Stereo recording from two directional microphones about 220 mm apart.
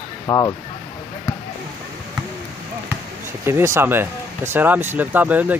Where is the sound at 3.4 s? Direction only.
10° right (ahead or behind).